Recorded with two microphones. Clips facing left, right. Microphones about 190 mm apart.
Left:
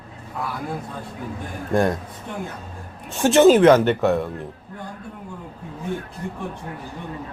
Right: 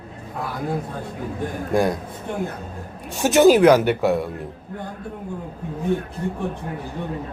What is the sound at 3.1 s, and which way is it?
Speech, 15° right (ahead or behind).